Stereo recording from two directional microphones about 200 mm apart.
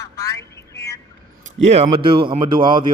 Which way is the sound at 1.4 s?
35° right (ahead or behind).